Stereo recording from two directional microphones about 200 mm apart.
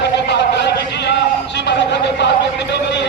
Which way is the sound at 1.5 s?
60° left (ahead or behind).